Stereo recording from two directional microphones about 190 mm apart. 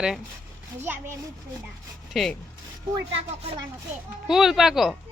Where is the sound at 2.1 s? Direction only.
Centre (ahead or behind).